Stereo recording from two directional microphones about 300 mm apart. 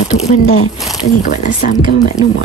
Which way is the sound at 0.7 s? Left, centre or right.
Centre.